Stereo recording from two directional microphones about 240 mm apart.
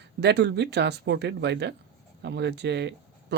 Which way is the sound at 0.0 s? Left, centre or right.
Right.